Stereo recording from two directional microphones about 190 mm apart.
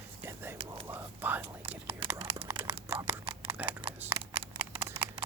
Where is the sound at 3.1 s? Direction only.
30° right (ahead or behind).